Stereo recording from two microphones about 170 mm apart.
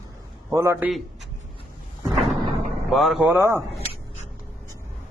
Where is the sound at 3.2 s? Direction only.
15° right (ahead or behind).